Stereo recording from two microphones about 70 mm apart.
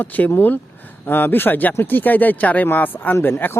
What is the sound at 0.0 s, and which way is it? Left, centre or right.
Speech, left.